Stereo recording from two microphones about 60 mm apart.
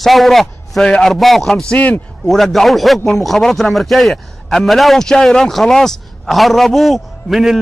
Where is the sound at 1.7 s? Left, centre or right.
Left.